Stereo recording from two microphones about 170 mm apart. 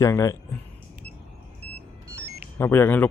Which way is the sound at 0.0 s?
20° left (ahead or behind).